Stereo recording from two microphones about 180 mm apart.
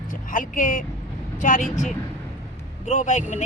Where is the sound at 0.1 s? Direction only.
50° left (ahead or behind).